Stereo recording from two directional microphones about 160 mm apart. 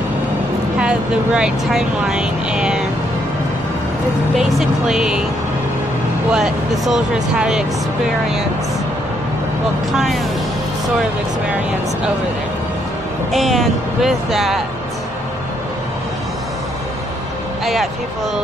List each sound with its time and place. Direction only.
0.7 s speech: 5° right (ahead or behind)
4.4 s speech: centre (ahead or behind)
6.3 s speech: 5° right (ahead or behind)
9.9 s speech: centre (ahead or behind)
13.3 s speech: centre (ahead or behind)